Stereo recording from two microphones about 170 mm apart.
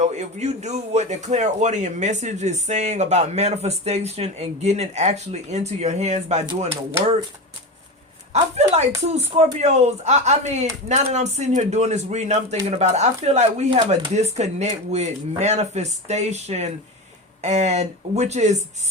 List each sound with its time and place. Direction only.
0.0 s a man's voice: 40° right (ahead or behind)
8.3 s a man's voice: 40° right (ahead or behind)